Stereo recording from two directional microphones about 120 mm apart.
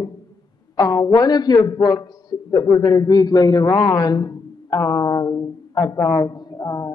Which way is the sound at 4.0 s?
35° left (ahead or behind).